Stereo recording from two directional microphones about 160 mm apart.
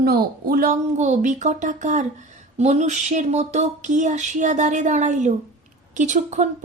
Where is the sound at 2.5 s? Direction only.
45° right (ahead or behind).